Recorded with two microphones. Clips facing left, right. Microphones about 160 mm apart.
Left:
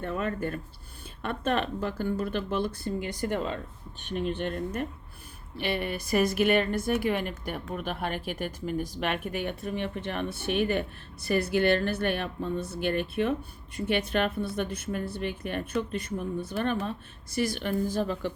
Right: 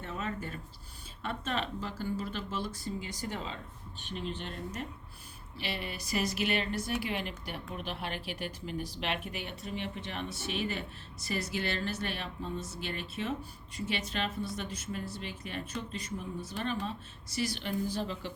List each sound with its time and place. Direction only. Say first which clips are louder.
0.0 s speech: left 7 dB; 55° left (ahead or behind)